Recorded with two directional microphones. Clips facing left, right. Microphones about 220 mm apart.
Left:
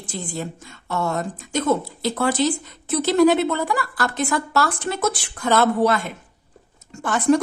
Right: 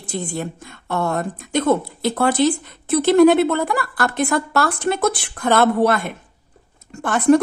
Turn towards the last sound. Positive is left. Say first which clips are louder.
# right 3 dB
turn(degrees=-55)  # may be behind; listen again after turning